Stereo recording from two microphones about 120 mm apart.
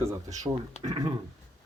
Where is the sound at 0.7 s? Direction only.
65° left (ahead or behind).